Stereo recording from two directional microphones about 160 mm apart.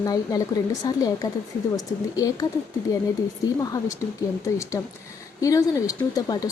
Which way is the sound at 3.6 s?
20° left (ahead or behind).